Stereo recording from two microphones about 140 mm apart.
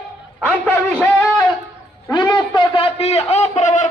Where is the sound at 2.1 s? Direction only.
30° left (ahead or behind); by 3.9 s 60° left (ahead or behind).